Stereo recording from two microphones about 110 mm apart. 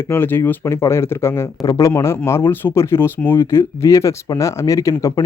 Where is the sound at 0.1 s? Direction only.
20° left (ahead or behind).